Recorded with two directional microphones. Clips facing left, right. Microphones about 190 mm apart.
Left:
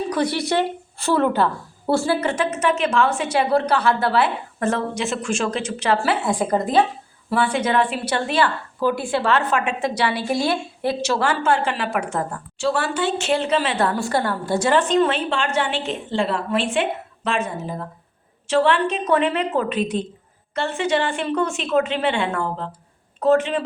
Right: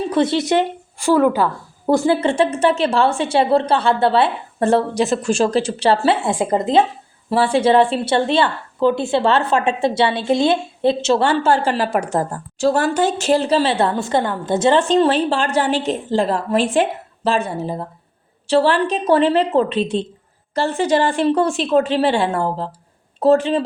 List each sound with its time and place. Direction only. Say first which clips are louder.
0.1 s a woman's voice: right 6 dB; 25° right (ahead or behind)